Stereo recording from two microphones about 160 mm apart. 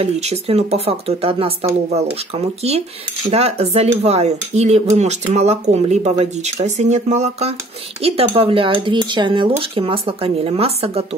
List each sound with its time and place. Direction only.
0.0 s speech: 40° right (ahead or behind)